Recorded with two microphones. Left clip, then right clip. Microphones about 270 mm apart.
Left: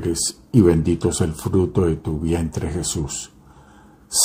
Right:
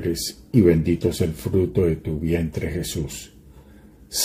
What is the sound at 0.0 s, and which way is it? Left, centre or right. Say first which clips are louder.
Speech: left 2 dB; centre.